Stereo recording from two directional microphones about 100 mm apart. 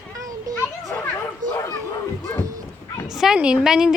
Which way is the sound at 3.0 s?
5° right (ahead or behind).